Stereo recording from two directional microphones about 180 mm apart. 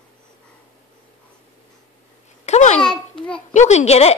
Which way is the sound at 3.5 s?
40° left (ahead or behind).